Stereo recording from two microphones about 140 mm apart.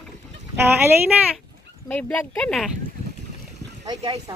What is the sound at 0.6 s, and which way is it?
Speech, 15° right (ahead or behind).